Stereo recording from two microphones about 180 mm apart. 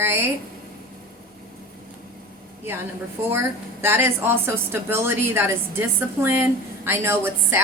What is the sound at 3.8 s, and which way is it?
A woman's voice, 15° right (ahead or behind).